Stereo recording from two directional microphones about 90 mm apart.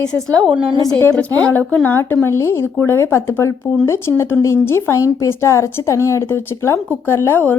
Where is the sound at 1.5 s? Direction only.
20° left (ahead or behind).